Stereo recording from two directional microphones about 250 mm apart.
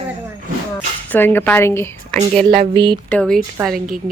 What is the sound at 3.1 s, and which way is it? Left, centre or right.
Speech, centre.